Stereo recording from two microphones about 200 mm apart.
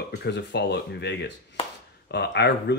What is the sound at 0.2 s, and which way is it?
Speech, 60° left (ahead or behind).